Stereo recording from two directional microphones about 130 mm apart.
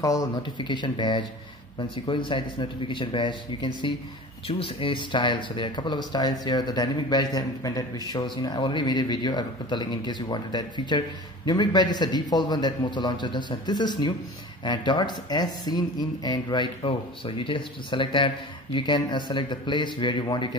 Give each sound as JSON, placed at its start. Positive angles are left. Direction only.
{"t": 0.0, "sound": "speech", "side_deg": 25}
{"t": 0.6, "sound": "speech", "side_deg": 35}